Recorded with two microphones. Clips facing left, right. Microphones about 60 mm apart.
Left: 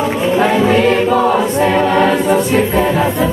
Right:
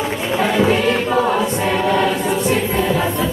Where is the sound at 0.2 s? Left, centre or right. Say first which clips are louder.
Left 4 dB; left.